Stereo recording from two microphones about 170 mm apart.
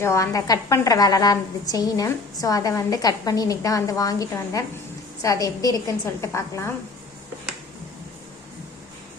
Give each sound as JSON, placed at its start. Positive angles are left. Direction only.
{"t": 0.0, "sound": "a woman's voice", "side_deg": 15}